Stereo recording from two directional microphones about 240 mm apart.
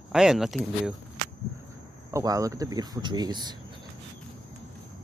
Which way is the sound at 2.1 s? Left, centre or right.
Centre.